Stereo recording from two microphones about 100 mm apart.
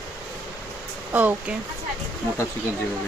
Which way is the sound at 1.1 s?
20° right (ahead or behind).